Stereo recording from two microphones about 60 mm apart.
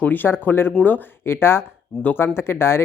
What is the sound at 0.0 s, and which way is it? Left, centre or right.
Speech, left.